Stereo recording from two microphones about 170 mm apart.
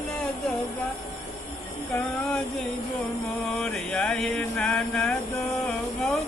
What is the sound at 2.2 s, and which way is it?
Speech, centre (ahead or behind).